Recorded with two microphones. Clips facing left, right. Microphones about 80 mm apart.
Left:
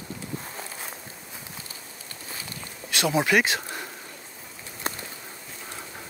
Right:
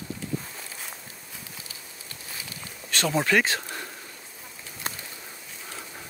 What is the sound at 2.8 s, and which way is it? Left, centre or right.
Speech, centre.